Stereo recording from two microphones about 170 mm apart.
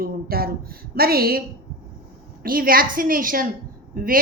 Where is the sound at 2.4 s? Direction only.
60° right (ahead or behind).